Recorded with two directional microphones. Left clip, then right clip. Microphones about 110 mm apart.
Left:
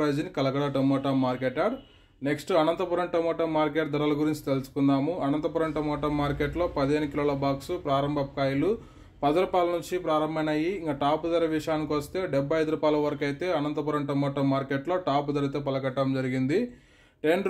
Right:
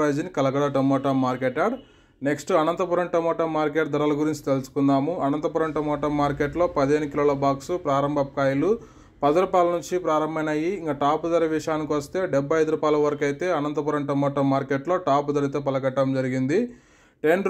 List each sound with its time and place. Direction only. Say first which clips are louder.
0.0 s speech: right 4 dB; 35° right (ahead or behind)